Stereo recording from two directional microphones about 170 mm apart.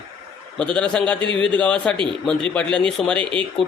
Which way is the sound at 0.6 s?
5° left (ahead or behind).